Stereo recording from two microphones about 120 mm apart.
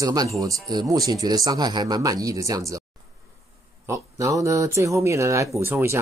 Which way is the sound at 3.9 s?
25° right (ahead or behind).